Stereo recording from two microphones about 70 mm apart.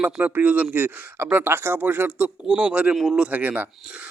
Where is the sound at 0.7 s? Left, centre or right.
Right; by 2.9 s centre.